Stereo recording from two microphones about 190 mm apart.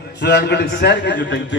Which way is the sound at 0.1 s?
60° left (ahead or behind).